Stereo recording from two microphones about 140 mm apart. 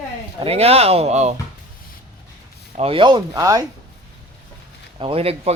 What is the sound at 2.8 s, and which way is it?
Speech, 40° right (ahead or behind).